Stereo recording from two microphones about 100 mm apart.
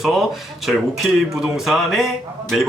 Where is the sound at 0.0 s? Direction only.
5° right (ahead or behind).